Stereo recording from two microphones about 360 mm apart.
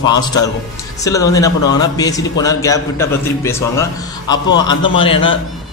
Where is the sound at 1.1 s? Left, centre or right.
Centre.